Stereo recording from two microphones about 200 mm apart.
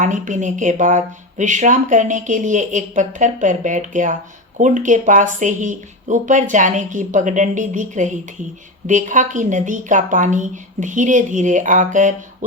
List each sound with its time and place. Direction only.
0.0 s a woman's voice: 40° right (ahead or behind)